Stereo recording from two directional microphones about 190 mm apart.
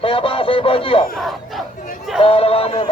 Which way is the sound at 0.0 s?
30° left (ahead or behind).